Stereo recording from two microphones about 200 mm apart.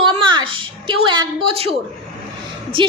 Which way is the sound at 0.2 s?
25° right (ahead or behind).